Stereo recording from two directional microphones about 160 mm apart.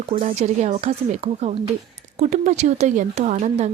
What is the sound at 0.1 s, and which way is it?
Speech, 40° right (ahead or behind).